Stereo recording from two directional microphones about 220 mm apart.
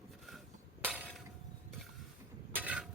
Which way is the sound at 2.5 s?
5° right (ahead or behind).